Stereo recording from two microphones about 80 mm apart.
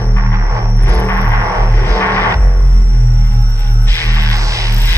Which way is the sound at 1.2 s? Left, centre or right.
Right.